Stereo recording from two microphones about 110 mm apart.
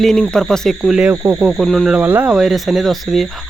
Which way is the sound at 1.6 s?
Centre (ahead or behind).